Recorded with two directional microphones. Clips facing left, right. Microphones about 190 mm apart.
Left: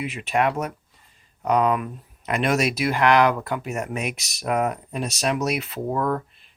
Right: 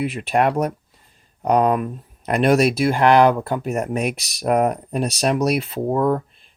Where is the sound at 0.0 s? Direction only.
35° right (ahead or behind).